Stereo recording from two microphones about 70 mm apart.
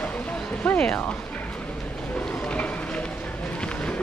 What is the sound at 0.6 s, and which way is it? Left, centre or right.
Music, centre.